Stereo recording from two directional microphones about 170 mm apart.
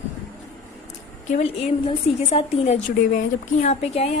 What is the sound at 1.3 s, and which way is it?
A woman's voice, 40° left (ahead or behind).